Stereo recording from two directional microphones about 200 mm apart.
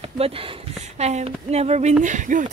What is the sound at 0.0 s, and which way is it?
Speech, 30° right (ahead or behind).